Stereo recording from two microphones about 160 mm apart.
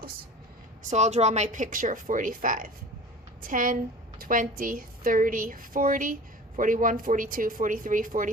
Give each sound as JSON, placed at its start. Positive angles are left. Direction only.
{"t": 0.8, "sound": "a woman's voice", "side_deg": -45}